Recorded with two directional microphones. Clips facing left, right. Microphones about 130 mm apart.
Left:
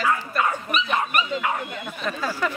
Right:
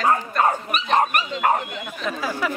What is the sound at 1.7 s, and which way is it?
Speech, 15° right (ahead or behind).